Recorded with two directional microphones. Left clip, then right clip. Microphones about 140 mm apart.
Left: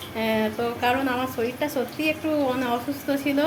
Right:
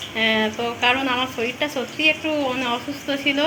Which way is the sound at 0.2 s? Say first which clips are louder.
Right 4 dB; 15° left (ahead or behind).